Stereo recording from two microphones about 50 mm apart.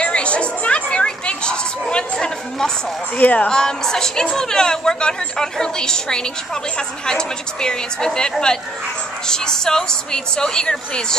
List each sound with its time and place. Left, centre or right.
0.0 s chatter: left
3.2 s speech: left
3.4 s a woman's voice: centre